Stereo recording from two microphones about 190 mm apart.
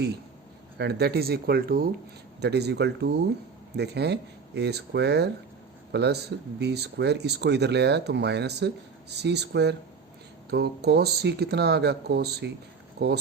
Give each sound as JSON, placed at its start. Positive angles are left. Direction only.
{"t": 0.8, "sound": "speech", "side_deg": -60}